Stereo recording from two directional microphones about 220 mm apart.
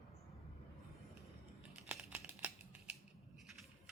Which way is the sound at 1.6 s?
5° right (ahead or behind).